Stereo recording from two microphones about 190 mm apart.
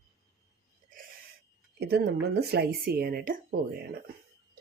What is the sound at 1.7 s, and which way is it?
Speech, 55° right (ahead or behind).